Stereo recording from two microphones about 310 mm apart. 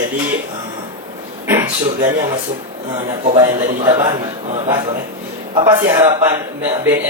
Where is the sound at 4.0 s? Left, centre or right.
Centre.